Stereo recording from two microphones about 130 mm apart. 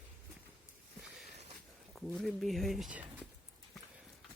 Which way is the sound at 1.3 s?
60° right (ahead or behind).